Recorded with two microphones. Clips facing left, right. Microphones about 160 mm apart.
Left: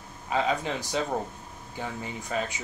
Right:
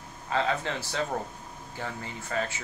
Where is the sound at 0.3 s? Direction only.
15° left (ahead or behind).